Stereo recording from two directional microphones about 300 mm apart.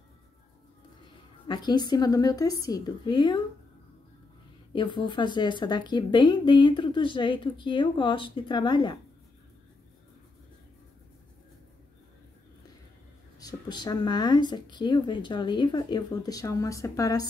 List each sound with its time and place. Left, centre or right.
1.5 s speech: centre
4.7 s speech: centre
13.4 s speech: centre